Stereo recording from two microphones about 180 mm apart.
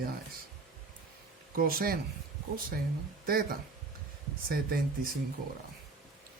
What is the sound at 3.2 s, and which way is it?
Speech, 55° right (ahead or behind).